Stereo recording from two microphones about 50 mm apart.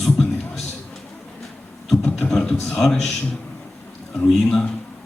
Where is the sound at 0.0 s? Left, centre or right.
Centre.